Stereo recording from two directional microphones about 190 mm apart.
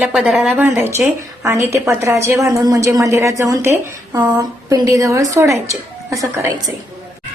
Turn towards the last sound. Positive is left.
turn(degrees=-15)  # may be behind; listen again after turning